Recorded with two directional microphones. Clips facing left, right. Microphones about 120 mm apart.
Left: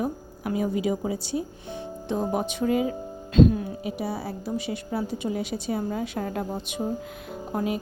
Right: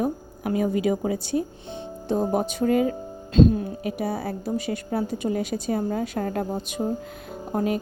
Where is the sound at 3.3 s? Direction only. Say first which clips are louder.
Right 1 dB; 35° right (ahead or behind).